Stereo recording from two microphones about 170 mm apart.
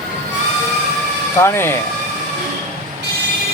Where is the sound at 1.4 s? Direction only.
15° left (ahead or behind).